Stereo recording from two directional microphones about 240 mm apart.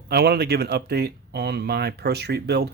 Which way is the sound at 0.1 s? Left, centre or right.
Right.